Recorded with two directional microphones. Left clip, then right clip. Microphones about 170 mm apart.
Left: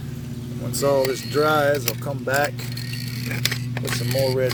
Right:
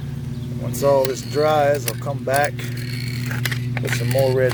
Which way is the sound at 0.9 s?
40° left (ahead or behind).